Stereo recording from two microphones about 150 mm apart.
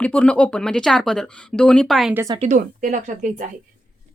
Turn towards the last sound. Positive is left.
turn(degrees=-55)  # may be behind; listen again after turning